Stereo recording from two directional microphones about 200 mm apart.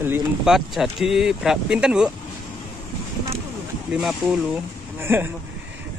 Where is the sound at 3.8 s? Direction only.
5° right (ahead or behind).